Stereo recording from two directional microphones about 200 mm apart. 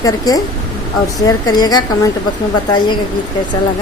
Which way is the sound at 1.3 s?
20° left (ahead or behind).